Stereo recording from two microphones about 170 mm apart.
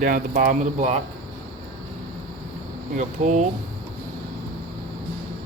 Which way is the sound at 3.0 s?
45° right (ahead or behind).